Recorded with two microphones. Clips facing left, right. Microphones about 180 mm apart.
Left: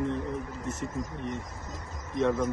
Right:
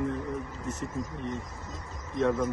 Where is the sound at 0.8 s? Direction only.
15° left (ahead or behind).